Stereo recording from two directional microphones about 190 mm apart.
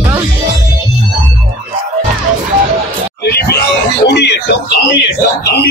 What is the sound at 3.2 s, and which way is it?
Music, 60° left (ahead or behind).